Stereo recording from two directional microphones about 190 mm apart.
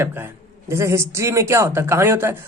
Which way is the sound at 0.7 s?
15° right (ahead or behind).